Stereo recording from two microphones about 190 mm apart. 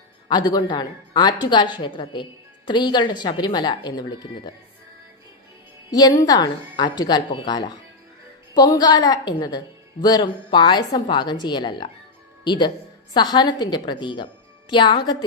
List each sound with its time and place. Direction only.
0.3 s a woman's voice: 20° left (ahead or behind)
5.9 s a woman's voice: 20° left (ahead or behind)